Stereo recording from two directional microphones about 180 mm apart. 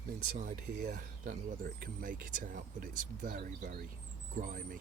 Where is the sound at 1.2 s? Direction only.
50° right (ahead or behind).